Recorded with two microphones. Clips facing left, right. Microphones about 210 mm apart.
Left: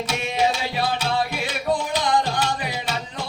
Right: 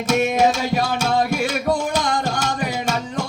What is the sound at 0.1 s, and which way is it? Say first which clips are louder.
Music: right 8 dB; 50° right (ahead or behind).